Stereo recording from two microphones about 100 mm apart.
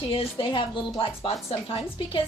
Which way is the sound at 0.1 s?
60° left (ahead or behind).